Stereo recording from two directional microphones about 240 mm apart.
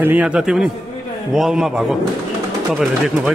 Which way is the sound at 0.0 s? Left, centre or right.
Centre.